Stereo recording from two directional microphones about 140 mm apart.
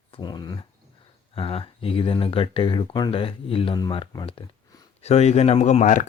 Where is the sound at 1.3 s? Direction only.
40° left (ahead or behind).